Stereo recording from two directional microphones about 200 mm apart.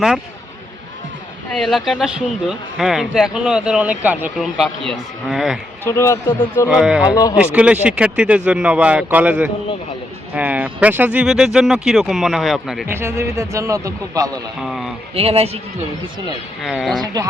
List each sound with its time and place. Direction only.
1.5 s speech: centre (ahead or behind)
5.8 s speech: 15° left (ahead or behind)
6.7 s speech: 5° right (ahead or behind)
12.9 s speech: 15° right (ahead or behind)
14.6 s speech: centre (ahead or behind)
15.1 s speech: 30° right (ahead or behind)
16.6 s speech: centre (ahead or behind)